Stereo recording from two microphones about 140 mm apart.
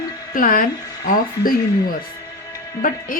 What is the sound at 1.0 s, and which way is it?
Speech, 90° left.